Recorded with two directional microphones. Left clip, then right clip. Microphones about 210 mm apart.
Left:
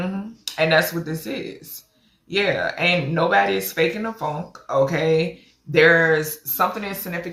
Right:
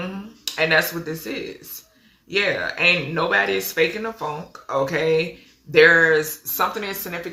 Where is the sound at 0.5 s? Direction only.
10° right (ahead or behind).